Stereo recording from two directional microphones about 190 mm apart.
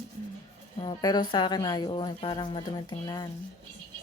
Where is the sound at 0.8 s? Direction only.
20° left (ahead or behind).